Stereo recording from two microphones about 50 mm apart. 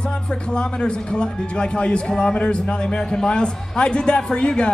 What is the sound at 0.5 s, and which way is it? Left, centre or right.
A man's voice, centre.